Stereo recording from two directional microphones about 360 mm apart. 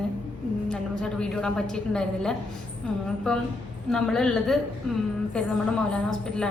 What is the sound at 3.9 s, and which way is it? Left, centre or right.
Speech, centre.